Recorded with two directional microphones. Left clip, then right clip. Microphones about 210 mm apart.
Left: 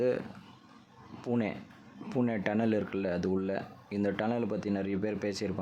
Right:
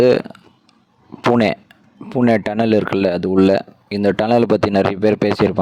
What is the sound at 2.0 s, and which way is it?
Speech, 45° right (ahead or behind).